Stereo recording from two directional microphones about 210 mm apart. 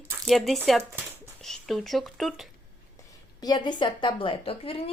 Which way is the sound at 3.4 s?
20° left (ahead or behind).